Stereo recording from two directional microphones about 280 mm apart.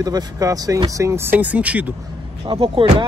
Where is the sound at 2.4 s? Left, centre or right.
Centre.